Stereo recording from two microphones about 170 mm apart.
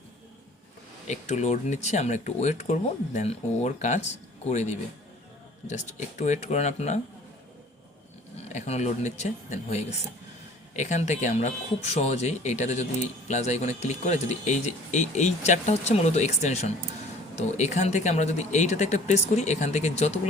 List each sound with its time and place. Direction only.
1.0 s speech: 45° left (ahead or behind)
8.5 s speech: 40° left (ahead or behind)